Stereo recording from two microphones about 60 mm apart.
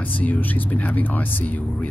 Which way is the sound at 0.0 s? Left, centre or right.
Left.